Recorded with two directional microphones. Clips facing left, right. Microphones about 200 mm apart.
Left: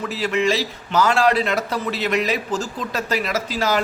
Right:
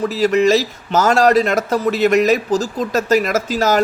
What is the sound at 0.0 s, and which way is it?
A man's voice, 40° right (ahead or behind).